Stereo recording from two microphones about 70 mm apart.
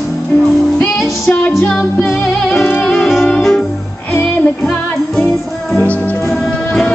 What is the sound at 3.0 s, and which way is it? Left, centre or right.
Music, centre.